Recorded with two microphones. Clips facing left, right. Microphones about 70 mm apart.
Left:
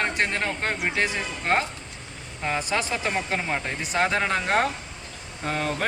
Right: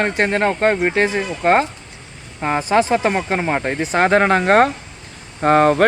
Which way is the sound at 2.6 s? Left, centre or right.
Right.